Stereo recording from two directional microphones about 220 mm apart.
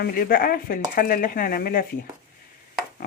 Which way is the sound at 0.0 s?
40° left (ahead or behind).